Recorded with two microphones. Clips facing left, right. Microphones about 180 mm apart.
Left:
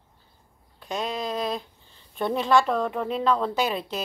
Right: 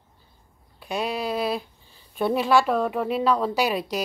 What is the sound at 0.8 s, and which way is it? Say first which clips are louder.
A woman's voice: right 2 dB; 10° right (ahead or behind).